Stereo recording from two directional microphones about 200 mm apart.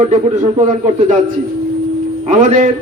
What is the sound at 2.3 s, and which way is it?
Speech, 35° right (ahead or behind).